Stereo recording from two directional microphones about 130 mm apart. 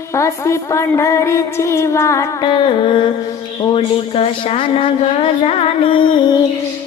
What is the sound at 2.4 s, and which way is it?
Humming, 40° left (ahead or behind).